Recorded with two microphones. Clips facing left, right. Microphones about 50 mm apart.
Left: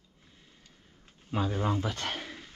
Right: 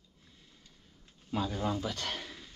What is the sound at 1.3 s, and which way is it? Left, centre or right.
Speech, left.